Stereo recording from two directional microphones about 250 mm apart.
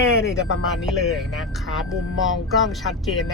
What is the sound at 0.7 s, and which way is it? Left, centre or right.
Speech, centre.